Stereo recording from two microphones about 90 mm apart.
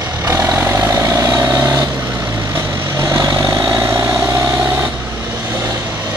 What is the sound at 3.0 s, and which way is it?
Vehicle, 35° right (ahead or behind).